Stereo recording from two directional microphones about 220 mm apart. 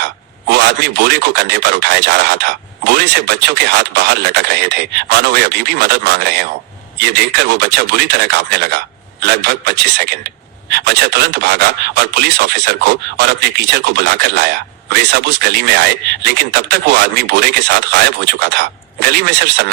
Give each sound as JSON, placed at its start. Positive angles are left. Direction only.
{"t": 0.0, "sound": "a man's voice", "side_deg": -50}